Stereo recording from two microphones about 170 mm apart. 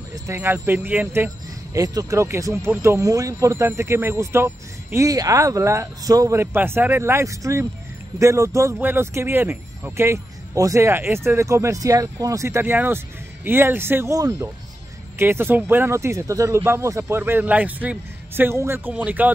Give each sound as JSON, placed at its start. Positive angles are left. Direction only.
{"t": 0.1, "sound": "speech", "side_deg": -15}